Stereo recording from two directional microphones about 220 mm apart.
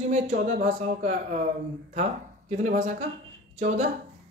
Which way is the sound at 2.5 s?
35° right (ahead or behind).